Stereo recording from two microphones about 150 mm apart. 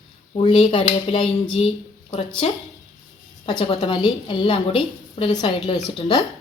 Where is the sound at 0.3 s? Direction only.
35° left (ahead or behind).